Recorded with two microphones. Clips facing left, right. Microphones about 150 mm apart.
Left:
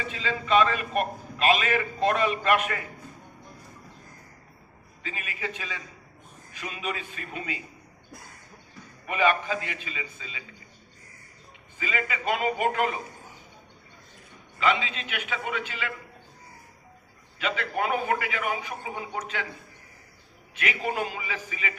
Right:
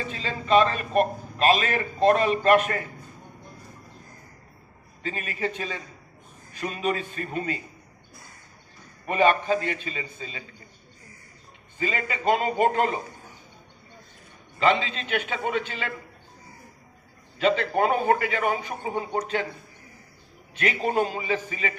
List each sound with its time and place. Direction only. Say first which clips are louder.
0.1 s a man's voice: right 3 dB; 35° right (ahead or behind)
5.0 s a man's voice: right 6 dB; 40° right (ahead or behind)
9.0 s a man's voice: right 4 dB; 35° right (ahead or behind)
11.8 s a man's voice: right 2 dB; 35° right (ahead or behind)
14.6 s a man's voice: right 3 dB; 35° right (ahead or behind)
17.4 s a man's voice: right 6 dB; 35° right (ahead or behind)
20.6 s a man's voice: right 5 dB; 35° right (ahead or behind)